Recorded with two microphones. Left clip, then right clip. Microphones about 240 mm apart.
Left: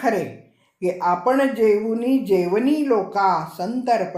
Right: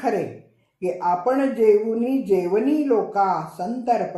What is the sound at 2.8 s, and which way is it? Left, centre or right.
Speech, left.